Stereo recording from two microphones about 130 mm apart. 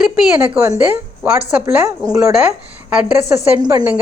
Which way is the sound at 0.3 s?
15° right (ahead or behind).